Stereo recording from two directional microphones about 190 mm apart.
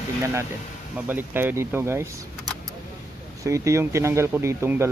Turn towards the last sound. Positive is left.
turn(degrees=-15)  # may be behind; listen again after turning